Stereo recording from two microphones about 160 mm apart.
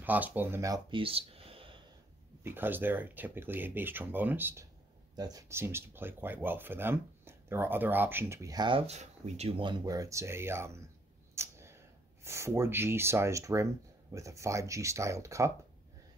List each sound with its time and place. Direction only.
0.0 s speech: 10° right (ahead or behind); by 1.8 s 35° right (ahead or behind)
2.4 s speech: 10° right (ahead or behind)
5.1 s speech: 25° right (ahead or behind)
8.8 s speech: 45° right (ahead or behind); by 10.8 s 15° right (ahead or behind)
11.3 s a sound: 15° right (ahead or behind)
12.3 s speech: 15° right (ahead or behind)